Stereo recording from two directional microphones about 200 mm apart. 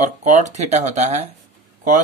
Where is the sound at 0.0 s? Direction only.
35° right (ahead or behind).